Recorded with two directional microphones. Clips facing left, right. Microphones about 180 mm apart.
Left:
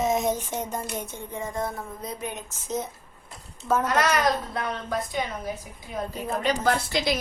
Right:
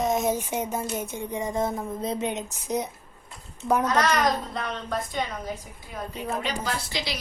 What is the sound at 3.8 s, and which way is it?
A child's voice, 10° left (ahead or behind).